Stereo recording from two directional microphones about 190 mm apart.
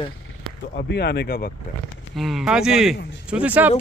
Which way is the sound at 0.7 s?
60° left (ahead or behind).